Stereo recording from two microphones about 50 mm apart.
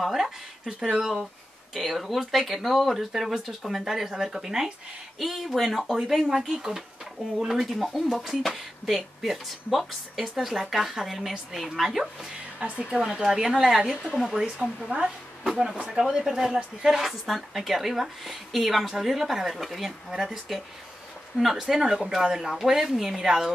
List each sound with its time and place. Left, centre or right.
0.0 s speech: centre
12.5 s a woman's voice: right
17.0 s speech: centre